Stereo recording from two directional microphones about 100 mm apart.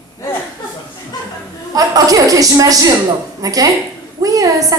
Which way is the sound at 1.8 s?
35° right (ahead or behind).